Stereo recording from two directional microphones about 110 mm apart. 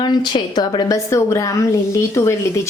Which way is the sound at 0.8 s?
25° left (ahead or behind).